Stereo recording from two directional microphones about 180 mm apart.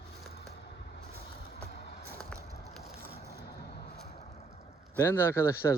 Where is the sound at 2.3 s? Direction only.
5° left (ahead or behind).